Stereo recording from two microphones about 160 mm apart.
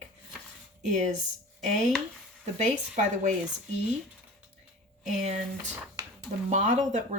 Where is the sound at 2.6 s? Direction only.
50° right (ahead or behind).